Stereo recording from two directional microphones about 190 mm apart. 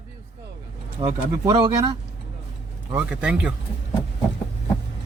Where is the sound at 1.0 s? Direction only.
20° right (ahead or behind).